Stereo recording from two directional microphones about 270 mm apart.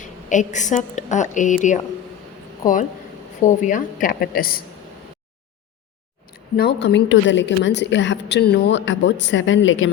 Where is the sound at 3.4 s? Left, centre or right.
Left.